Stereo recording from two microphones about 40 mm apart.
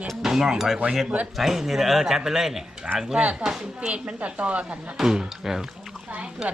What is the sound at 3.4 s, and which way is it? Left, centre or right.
Speech, centre.